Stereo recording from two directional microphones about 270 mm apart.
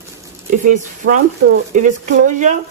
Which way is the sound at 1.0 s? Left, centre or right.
Right.